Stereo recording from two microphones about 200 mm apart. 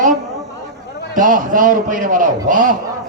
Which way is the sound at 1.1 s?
40° right (ahead or behind).